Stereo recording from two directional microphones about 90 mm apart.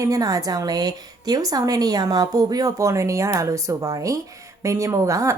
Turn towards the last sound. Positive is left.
turn(degrees=-35)  # may be behind; listen again after turning